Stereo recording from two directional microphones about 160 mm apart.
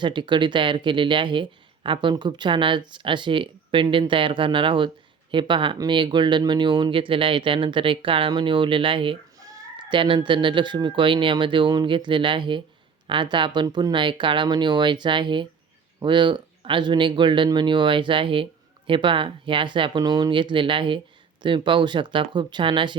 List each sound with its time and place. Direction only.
0.0 s speech: 30° right (ahead or behind)